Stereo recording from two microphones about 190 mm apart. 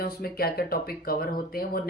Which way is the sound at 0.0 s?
55° left (ahead or behind).